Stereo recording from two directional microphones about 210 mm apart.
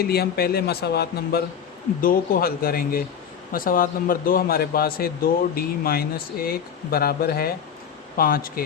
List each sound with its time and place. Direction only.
0.0 s a man's voice: 50° left (ahead or behind)